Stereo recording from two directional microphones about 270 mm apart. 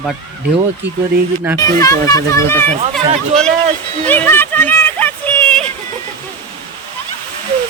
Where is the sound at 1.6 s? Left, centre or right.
Centre.